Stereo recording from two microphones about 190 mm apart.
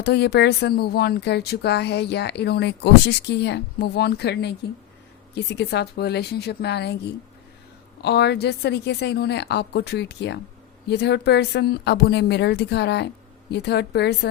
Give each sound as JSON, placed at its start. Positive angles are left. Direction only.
{"t": 0.0, "sound": "speech", "side_deg": 60}